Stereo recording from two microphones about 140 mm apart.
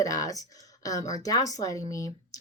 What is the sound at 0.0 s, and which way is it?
A woman's voice, 25° left (ahead or behind).